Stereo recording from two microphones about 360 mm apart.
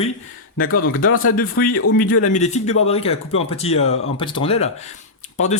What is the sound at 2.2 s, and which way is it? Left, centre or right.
A man's voice, centre.